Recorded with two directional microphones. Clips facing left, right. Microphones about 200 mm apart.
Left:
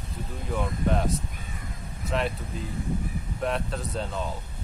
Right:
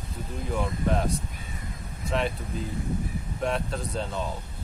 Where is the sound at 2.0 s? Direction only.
Centre (ahead or behind).